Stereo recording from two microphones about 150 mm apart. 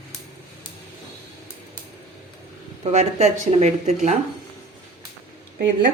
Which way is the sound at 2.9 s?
50° right (ahead or behind).